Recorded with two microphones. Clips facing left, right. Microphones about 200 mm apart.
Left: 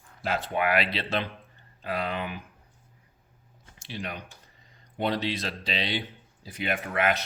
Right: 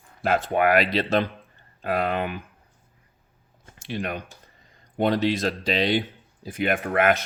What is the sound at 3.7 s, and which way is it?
Speech, 55° right (ahead or behind).